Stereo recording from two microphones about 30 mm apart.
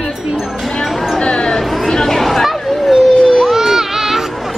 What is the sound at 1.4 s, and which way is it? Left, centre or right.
Chatter, centre.